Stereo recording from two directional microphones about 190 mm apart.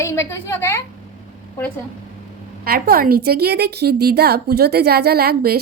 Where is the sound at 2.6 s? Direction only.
50° right (ahead or behind).